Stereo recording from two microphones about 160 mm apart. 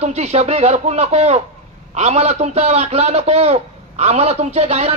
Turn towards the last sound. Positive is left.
turn(degrees=-40)  # may be behind; listen again after turning